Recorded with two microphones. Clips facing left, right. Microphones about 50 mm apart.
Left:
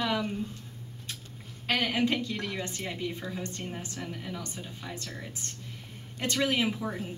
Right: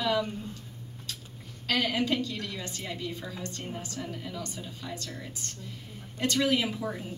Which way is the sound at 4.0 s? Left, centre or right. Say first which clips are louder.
Even; centre.